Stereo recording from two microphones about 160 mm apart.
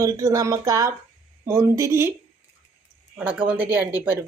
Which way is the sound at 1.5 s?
15° right (ahead or behind).